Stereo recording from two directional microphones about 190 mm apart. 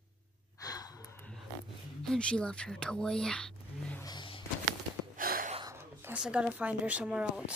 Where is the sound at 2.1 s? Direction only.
5° left (ahead or behind).